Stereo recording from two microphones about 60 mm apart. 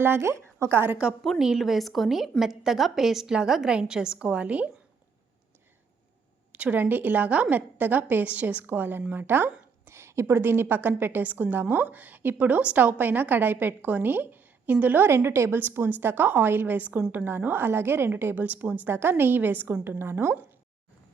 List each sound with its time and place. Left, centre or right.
0.0 s a woman's voice: right
1.2 s a woman's voice: centre; by 4.7 s right
6.5 s a woman's voice: right
9.9 s a sound: right
10.3 s a woman's voice: right